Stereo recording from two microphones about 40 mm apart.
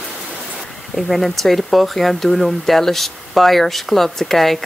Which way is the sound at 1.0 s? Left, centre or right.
Centre.